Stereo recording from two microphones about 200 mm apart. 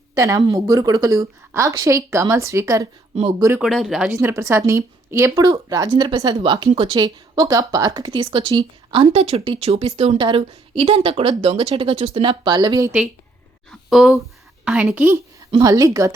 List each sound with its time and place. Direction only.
0.1 s a woman's voice: 15° right (ahead or behind)
13.7 s a woman's voice: centre (ahead or behind); by 16.1 s 15° right (ahead or behind)